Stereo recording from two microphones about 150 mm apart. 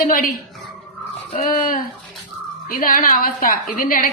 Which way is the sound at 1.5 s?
65° left (ahead or behind).